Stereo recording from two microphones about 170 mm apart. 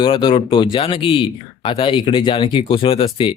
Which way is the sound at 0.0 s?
30° left (ahead or behind).